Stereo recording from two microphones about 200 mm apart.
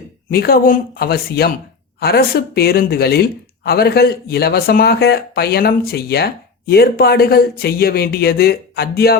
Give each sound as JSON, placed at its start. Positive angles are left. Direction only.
{"t": 0.3, "sound": "speech", "side_deg": 50}